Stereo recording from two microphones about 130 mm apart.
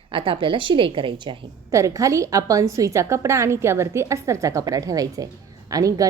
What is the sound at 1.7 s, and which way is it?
A woman's voice, 25° right (ahead or behind).